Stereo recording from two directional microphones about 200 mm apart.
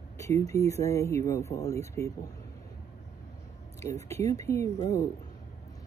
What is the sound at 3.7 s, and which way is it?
Speech, 15° left (ahead or behind).